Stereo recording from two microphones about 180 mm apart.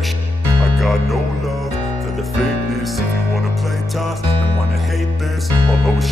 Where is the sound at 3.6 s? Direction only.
Centre (ahead or behind).